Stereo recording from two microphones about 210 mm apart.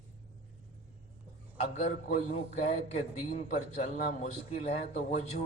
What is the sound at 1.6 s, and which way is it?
A man's voice, 30° left (ahead or behind).